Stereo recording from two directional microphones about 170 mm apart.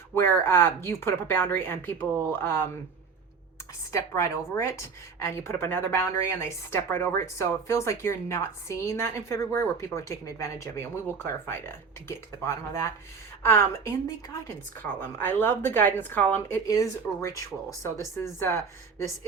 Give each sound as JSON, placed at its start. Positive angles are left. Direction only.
{"t": 0.1, "sound": "a woman's voice", "side_deg": 15}
{"t": 3.9, "sound": "a woman's voice", "side_deg": 15}
{"t": 12.0, "sound": "a woman's voice", "side_deg": 15}